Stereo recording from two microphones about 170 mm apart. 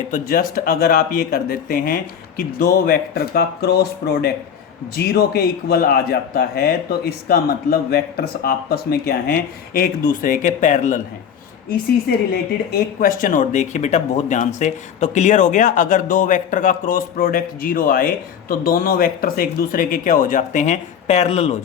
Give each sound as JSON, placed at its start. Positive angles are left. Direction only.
{"t": 0.1, "sound": "a man's voice", "side_deg": 55}
{"t": 12.3, "sound": "speech", "side_deg": 60}